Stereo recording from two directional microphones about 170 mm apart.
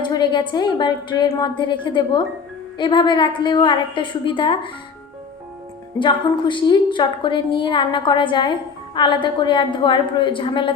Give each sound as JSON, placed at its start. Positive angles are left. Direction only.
{"t": 0.0, "sound": "a woman's voice", "side_deg": 25}
{"t": 6.0, "sound": "a woman's voice", "side_deg": 30}